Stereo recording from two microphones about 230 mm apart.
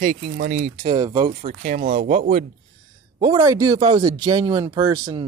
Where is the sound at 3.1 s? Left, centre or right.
Centre.